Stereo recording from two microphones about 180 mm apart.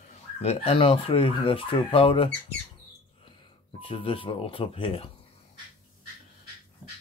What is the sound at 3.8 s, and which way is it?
Speech, 30° left (ahead or behind).